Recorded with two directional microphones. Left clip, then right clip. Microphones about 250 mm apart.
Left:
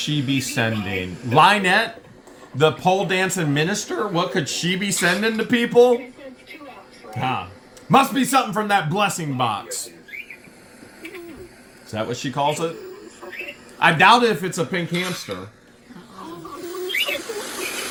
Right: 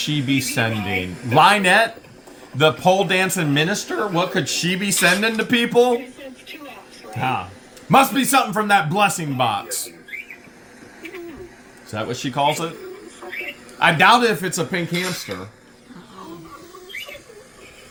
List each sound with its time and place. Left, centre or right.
0.0 s speech: centre
7.9 s speech: centre
11.9 s speech: centre
13.2 s a sound: centre
13.7 s speech: centre
16.6 s a sound: left